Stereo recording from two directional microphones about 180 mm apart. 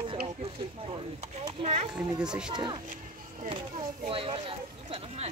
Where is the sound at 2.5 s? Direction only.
25° right (ahead or behind).